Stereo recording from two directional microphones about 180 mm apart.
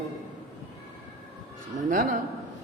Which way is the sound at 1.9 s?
45° right (ahead or behind).